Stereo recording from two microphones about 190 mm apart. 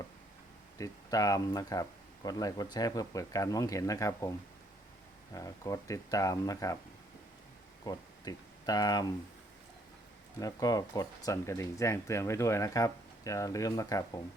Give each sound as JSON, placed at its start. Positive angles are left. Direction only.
{"t": 0.8, "sound": "speech", "side_deg": 20}
{"t": 7.9, "sound": "speech", "side_deg": 20}
{"t": 10.4, "sound": "speech", "side_deg": 20}